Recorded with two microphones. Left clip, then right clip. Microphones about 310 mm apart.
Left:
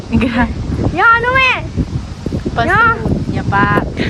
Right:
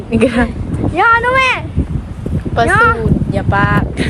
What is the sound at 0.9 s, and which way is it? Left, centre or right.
Speech, right.